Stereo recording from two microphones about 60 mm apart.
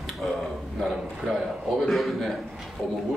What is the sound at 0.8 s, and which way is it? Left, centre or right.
A man's voice, centre.